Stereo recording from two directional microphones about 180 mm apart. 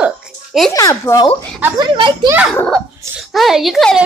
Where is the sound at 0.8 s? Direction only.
20° left (ahead or behind).